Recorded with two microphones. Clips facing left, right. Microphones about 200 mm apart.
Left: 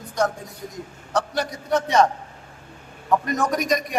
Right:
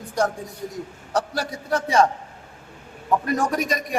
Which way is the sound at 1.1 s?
30° right (ahead or behind).